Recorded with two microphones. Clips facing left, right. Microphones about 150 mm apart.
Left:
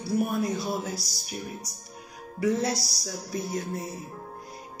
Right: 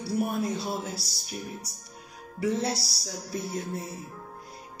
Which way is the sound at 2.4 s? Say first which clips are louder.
Left 2 dB; 30° right (ahead or behind).